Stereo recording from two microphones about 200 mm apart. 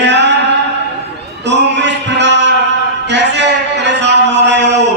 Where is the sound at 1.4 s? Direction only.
60° right (ahead or behind).